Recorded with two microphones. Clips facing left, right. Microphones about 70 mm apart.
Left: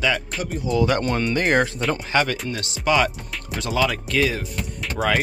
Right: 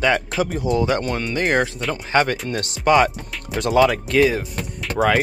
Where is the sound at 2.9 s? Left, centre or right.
Right.